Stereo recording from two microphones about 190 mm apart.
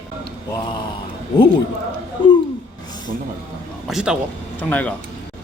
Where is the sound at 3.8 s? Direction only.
5° right (ahead or behind).